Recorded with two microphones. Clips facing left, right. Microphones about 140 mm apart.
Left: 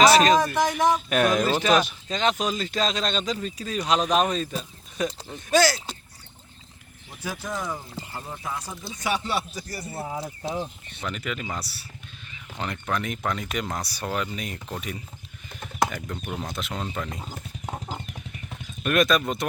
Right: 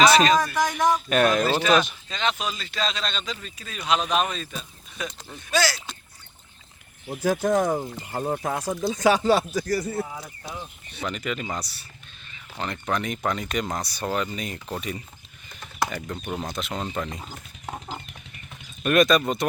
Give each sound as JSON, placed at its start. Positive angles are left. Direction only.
{"t": 0.0, "sound": "speech", "side_deg": 0}
{"t": 2.0, "sound": "speech", "side_deg": 40}
{"t": 7.1, "sound": "speech", "side_deg": -55}
{"t": 10.0, "sound": "speech", "side_deg": 30}
{"t": 11.0, "sound": "speech", "side_deg": 0}
{"t": 17.2, "sound": "clip-clop", "side_deg": 10}
{"t": 18.8, "sound": "speech", "side_deg": 0}